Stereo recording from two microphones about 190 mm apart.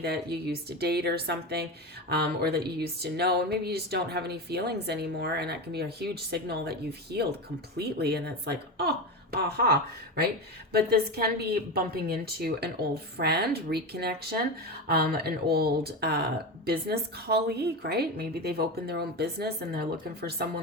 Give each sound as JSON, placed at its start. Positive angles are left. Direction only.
{"t": 0.0, "sound": "speech", "side_deg": -60}